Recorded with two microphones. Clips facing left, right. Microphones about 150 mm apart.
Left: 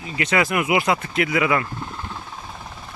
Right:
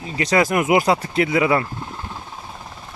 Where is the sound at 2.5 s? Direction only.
5° right (ahead or behind).